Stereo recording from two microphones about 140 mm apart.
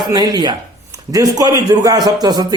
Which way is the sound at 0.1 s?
30° right (ahead or behind).